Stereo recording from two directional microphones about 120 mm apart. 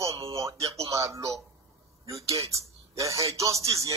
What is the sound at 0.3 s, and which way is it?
Speech, 25° right (ahead or behind).